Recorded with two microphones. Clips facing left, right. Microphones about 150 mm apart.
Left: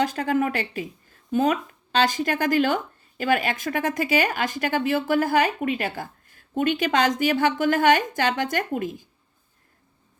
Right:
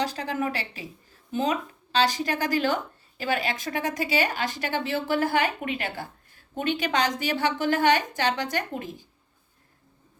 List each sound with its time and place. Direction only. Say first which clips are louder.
0.0 s speech: left 5 dB; 50° left (ahead or behind)